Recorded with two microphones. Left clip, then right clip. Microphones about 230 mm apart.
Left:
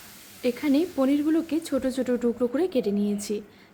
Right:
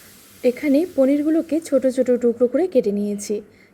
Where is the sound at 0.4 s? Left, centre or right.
Centre.